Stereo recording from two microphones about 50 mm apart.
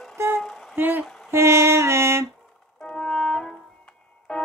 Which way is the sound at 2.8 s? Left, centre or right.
Centre.